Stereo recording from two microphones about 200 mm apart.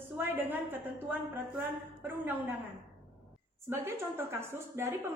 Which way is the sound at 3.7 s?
10° right (ahead or behind).